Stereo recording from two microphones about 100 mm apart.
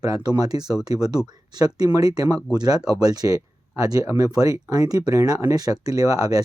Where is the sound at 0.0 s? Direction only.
40° right (ahead or behind).